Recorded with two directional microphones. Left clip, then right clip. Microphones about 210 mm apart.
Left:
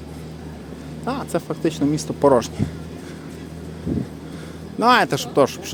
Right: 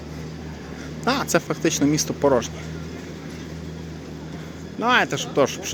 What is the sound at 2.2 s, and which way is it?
Speech, 20° left (ahead or behind).